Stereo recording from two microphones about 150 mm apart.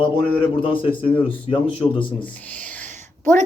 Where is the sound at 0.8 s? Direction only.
35° left (ahead or behind).